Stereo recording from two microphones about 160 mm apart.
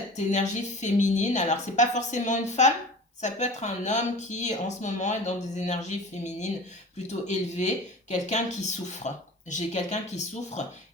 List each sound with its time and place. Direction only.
0.3 s speech: 50° left (ahead or behind)
7.1 s speech: 45° left (ahead or behind)